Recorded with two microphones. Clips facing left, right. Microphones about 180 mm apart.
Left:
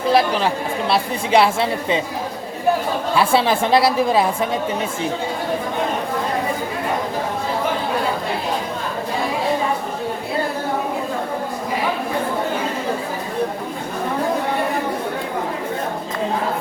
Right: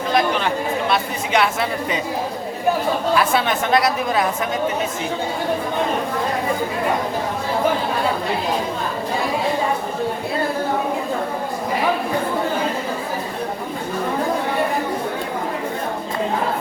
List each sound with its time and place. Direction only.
0.1 s speech: 35° left (ahead or behind)
3.2 s a woman's voice: 30° left (ahead or behind)